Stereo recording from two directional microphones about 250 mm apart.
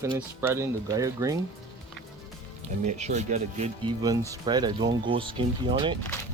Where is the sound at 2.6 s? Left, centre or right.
Right.